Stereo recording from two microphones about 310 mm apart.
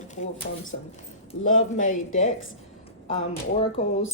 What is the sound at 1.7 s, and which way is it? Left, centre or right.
Speech, left.